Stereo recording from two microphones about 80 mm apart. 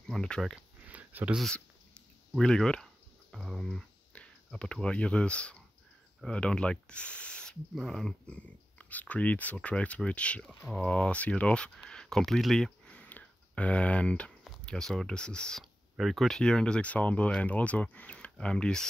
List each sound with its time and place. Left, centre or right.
0.0 s speech: centre
0.6 s a sound: centre
1.4 s a sound: centre
6.2 s speech: centre
7.7 s speech: centre
8.3 s speech: centre
15.6 s speech: centre